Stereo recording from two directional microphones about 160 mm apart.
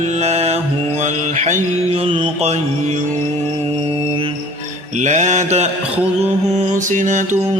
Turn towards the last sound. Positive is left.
turn(degrees=-50)  # may be behind; listen again after turning